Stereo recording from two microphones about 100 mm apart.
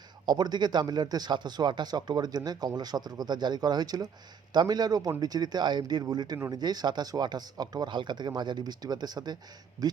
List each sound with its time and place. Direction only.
0.3 s speech: 45° right (ahead or behind)